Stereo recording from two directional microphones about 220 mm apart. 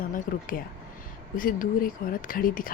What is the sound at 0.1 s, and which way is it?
Speech, 40° left (ahead or behind).